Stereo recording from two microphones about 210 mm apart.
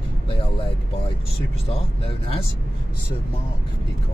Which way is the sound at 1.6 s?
25° left (ahead or behind).